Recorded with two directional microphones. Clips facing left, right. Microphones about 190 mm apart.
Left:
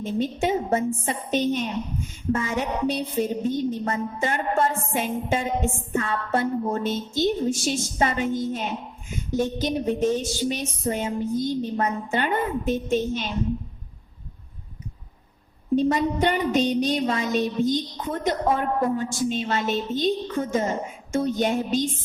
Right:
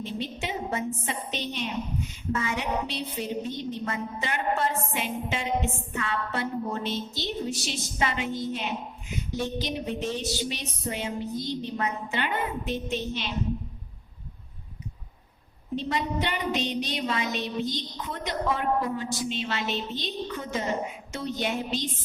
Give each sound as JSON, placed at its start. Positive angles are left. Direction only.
{"t": 0.0, "sound": "a woman's voice", "side_deg": 45}
{"t": 15.7, "sound": "a woman's voice", "side_deg": 45}